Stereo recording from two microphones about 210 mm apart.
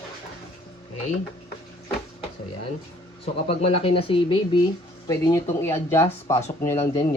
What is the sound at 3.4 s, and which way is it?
Speech, 30° left (ahead or behind).